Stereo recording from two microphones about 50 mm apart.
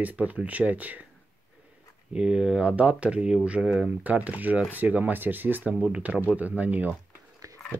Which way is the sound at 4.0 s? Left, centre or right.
Right.